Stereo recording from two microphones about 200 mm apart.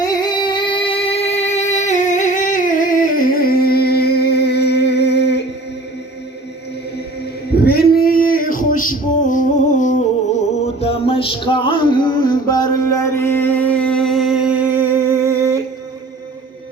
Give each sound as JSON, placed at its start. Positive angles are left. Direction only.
{"t": 0.0, "sound": "music", "side_deg": 20}
{"t": 7.6, "sound": "singing", "side_deg": 50}
{"t": 10.8, "sound": "music", "side_deg": 30}